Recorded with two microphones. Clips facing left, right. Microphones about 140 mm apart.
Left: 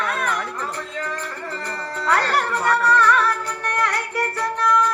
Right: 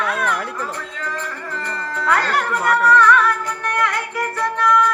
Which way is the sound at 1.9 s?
30° left (ahead or behind).